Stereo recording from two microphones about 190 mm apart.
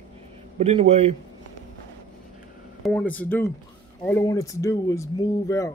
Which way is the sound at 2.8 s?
5° left (ahead or behind).